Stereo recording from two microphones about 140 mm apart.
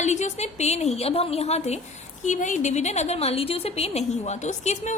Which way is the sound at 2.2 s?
60° left (ahead or behind).